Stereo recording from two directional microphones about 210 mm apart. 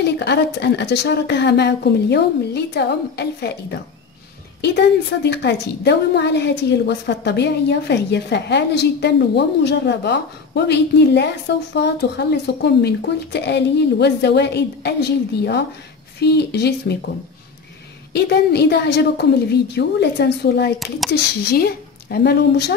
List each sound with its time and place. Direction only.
0.0 s a woman's voice: 55° left (ahead or behind)
4.6 s a woman's voice: 55° left (ahead or behind)
18.1 s a woman's voice: 50° left (ahead or behind)